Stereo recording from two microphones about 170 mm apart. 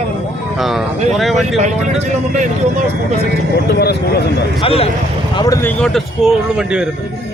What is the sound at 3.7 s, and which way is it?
Speech, 70° left (ahead or behind).